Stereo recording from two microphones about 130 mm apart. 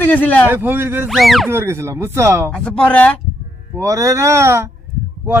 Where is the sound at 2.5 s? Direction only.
5° left (ahead or behind).